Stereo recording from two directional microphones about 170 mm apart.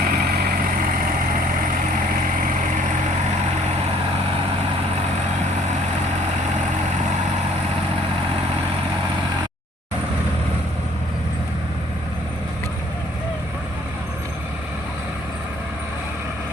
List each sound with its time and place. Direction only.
0.0 s vehicle: 60° right (ahead or behind)